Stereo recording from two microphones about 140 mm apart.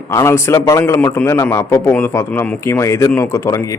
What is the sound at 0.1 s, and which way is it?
Speech, 20° left (ahead or behind).